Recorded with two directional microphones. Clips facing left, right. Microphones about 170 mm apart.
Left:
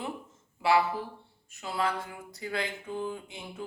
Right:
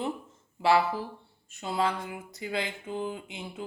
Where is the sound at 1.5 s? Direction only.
25° right (ahead or behind).